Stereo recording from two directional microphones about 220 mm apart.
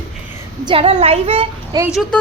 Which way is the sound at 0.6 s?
25° right (ahead or behind).